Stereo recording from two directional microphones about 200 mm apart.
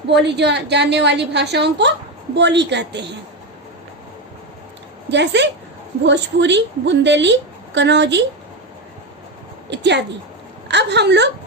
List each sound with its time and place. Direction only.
0.1 s a woman's voice: 55° right (ahead or behind)
5.1 s a woman's voice: 60° right (ahead or behind)
9.6 s a woman's voice: 60° right (ahead or behind)